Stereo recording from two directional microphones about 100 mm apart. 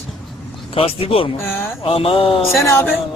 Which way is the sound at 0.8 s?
65° left (ahead or behind).